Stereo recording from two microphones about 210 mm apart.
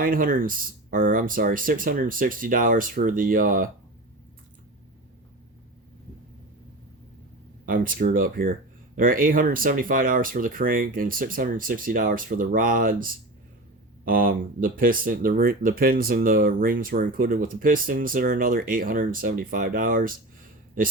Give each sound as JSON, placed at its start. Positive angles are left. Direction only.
{"t": 0.0, "sound": "speech", "side_deg": -40}
{"t": 7.6, "sound": "speech", "side_deg": -40}